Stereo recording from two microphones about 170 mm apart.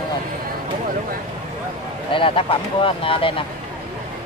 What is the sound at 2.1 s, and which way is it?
Speech, 30° left (ahead or behind).